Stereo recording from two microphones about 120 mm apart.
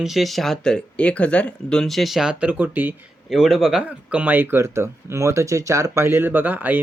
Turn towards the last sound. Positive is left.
turn(degrees=-15)  # may be behind; listen again after turning